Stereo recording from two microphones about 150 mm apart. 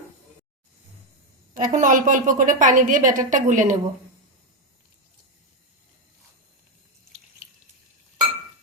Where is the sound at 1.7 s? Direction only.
60° right (ahead or behind).